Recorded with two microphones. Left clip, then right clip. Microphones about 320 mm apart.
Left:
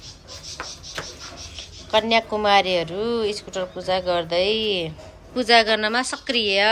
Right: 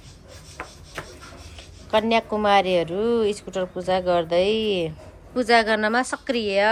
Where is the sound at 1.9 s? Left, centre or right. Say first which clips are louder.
Left 1 dB; centre.